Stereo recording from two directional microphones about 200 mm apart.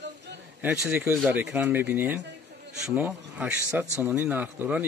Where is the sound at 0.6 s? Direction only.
10° right (ahead or behind).